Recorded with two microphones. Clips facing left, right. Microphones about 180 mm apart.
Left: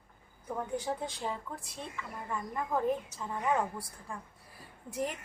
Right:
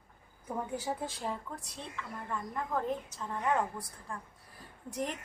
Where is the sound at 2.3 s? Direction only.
10° left (ahead or behind).